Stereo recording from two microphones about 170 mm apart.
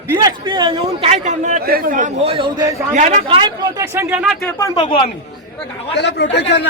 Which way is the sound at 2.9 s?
45° right (ahead or behind).